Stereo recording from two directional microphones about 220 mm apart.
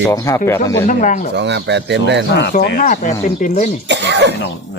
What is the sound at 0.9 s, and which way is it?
Speech, 35° left (ahead or behind).